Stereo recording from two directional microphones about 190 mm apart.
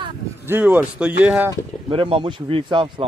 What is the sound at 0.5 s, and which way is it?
A man's voice, 10° right (ahead or behind).